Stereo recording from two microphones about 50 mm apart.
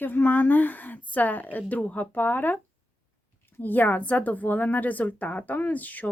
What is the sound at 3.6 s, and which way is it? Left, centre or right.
Speech, left.